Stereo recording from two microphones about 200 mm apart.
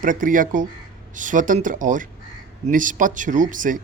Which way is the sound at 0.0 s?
40° right (ahead or behind).